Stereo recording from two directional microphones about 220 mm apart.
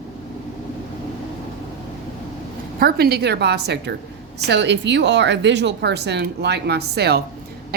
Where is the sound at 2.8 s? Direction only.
45° right (ahead or behind).